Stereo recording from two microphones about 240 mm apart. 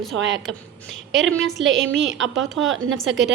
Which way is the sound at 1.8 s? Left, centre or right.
Right.